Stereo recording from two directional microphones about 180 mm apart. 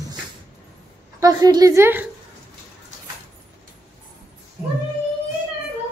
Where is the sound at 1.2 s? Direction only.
20° right (ahead or behind).